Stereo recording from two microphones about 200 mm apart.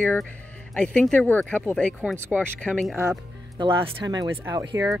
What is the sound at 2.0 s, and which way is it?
Speech, 5° right (ahead or behind).